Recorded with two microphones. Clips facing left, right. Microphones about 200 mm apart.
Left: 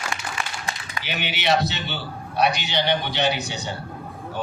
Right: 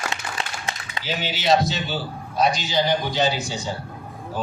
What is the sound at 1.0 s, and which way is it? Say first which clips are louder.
A man's voice: right 1 dB; 65° left (ahead or behind).